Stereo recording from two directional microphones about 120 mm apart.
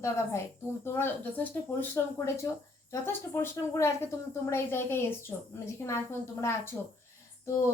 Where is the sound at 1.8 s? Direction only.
20° left (ahead or behind).